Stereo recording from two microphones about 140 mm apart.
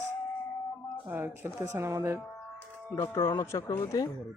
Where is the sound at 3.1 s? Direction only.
30° left (ahead or behind).